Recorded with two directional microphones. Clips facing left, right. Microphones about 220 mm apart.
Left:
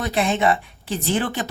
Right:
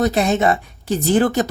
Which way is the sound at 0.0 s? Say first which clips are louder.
Right 4 dB; 40° right (ahead or behind).